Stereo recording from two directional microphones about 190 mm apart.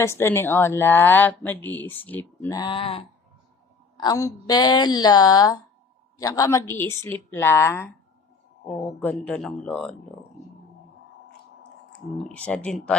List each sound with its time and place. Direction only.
0.0 s a woman's voice: 15° left (ahead or behind)
2.6 s speech: 25° left (ahead or behind)
4.0 s a woman's voice: 20° left (ahead or behind)
9.0 s a woman's voice: 10° left (ahead or behind)
12.1 s a woman's voice: 5° left (ahead or behind)